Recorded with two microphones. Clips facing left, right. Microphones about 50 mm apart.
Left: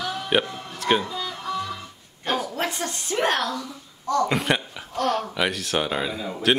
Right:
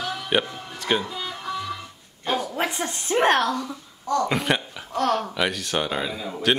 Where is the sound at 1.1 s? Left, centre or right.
Centre.